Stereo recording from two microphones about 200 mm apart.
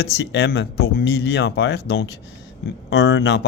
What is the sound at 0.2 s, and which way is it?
Speech, 60° left (ahead or behind).